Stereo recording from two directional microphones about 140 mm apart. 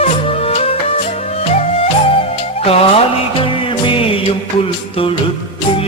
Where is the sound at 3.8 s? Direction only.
40° left (ahead or behind).